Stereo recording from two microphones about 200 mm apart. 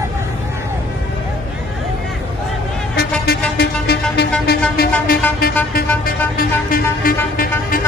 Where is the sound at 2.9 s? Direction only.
50° left (ahead or behind).